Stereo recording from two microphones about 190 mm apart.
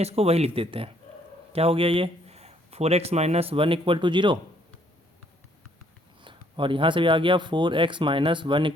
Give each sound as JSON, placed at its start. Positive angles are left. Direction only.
{"t": 0.0, "sound": "speech", "side_deg": -30}
{"t": 6.2, "sound": "speech", "side_deg": -25}